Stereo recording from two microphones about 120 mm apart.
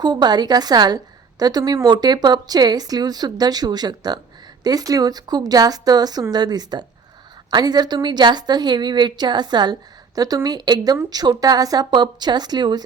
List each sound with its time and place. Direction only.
0.0 s a woman's voice: 35° right (ahead or behind)